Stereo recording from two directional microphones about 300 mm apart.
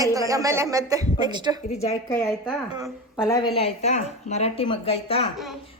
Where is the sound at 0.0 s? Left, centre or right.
Centre.